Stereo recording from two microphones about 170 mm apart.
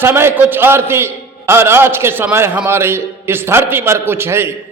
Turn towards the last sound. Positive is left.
turn(degrees=-15)  # may be behind; listen again after turning